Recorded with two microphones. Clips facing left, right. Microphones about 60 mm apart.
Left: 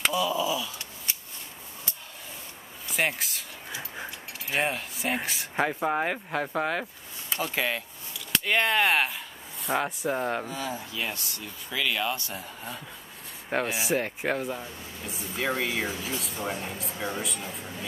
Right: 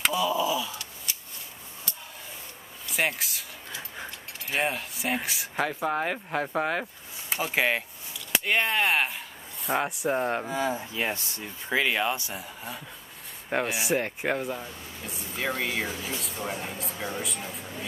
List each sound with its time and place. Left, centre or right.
0.0 s a sound: centre
0.5 s wail: centre
2.9 s speech: centre
5.6 s speech: centre
7.3 s speech: centre
8.3 s a sound: centre
9.8 s speech: centre
10.5 s speech: right
12.4 s speech: centre